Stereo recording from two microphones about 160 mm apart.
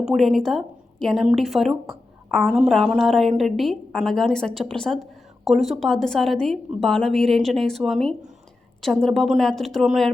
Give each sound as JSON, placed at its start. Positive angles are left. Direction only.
{"t": 0.0, "sound": "a woman's voice", "side_deg": -5}